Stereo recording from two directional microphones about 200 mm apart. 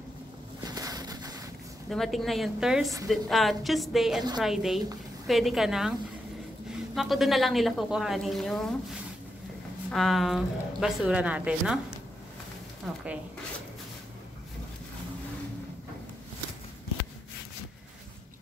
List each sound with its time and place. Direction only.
0.7 s boat: 20° right (ahead or behind)
1.9 s speech: centre (ahead or behind)
7.0 s speech: centre (ahead or behind)
9.8 s speech: centre (ahead or behind)
12.8 s speech: 5° right (ahead or behind)